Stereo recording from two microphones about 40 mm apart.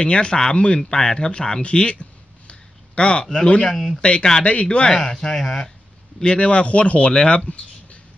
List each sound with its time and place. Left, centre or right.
0.0 s speech: left
3.7 s speech: centre
4.0 s speech: left
5.1 s speech: centre
6.2 s speech: left